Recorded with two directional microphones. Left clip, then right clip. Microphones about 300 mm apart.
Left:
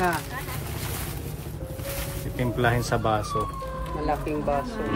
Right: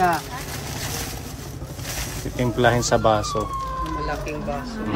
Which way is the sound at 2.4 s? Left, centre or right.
Centre.